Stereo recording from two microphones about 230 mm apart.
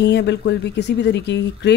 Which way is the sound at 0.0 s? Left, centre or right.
Left.